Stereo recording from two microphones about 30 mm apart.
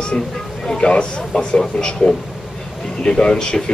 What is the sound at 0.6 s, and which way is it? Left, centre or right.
Speech, centre.